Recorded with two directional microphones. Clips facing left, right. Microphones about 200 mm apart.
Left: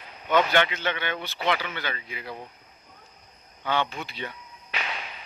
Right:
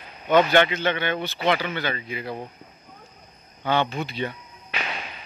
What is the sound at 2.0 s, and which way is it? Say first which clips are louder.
Speech: right 6 dB; 45° right (ahead or behind).